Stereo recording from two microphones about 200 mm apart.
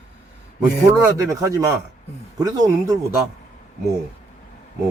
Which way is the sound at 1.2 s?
15° right (ahead or behind).